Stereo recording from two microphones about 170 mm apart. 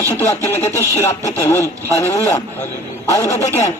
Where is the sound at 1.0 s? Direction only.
20° left (ahead or behind).